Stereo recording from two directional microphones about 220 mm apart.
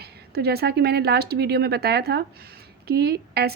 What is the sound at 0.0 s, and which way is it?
A woman's voice, 45° right (ahead or behind).